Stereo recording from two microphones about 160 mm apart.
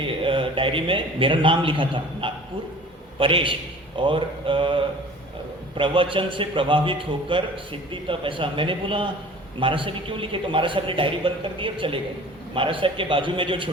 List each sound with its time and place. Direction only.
0.0 s a man's voice: 35° right (ahead or behind)